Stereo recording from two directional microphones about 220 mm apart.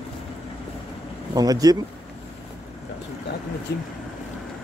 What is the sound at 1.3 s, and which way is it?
Speech, 15° right (ahead or behind).